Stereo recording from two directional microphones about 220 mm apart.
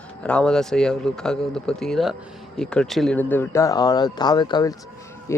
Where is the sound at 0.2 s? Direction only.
5° left (ahead or behind).